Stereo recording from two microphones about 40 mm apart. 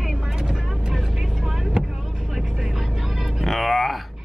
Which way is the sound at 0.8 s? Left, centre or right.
Centre.